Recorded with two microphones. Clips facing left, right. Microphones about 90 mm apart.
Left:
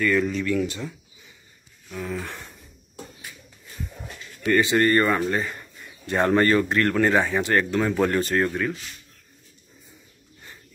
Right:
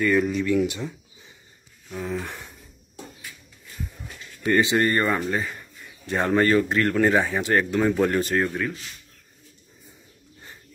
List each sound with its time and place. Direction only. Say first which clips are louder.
0.0 s speech: right 1 dB; 15° right (ahead or behind)
1.9 s speech: right 1 dB; 10° right (ahead or behind)
4.5 s speech: left 1 dB; 20° right (ahead or behind)
5.1 s speech: left 2 dB; centre (ahead or behind)